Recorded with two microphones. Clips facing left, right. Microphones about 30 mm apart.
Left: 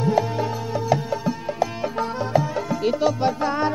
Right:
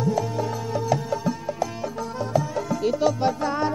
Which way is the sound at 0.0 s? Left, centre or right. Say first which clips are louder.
Left 3 dB; left.